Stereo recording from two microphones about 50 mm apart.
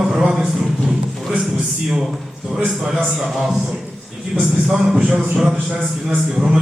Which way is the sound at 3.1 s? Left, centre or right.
Centre.